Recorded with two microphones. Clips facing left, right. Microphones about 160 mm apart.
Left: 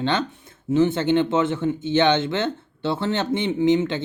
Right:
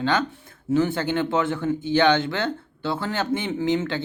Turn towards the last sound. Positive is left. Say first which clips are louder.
# left 4 dB
turn(degrees=20)  # may be behind; listen again after turning